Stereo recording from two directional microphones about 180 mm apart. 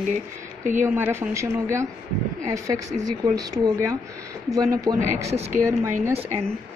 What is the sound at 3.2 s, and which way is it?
Speech, 20° right (ahead or behind).